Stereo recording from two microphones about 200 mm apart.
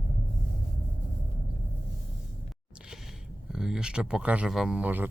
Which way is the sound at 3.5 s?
5° right (ahead or behind).